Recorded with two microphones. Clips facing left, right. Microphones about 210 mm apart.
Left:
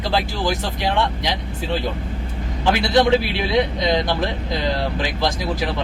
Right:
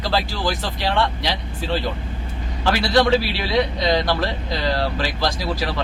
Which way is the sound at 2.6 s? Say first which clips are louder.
Left 1 dB; 20° left (ahead or behind).